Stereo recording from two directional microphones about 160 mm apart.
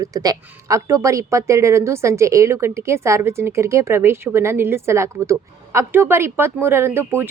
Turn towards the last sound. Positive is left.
turn(degrees=-15)  # may be behind; listen again after turning